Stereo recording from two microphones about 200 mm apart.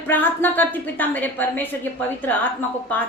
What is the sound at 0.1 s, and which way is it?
A woman's voice, 10° left (ahead or behind).